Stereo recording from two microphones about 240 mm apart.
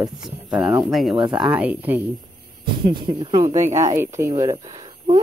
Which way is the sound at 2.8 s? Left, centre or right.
Centre.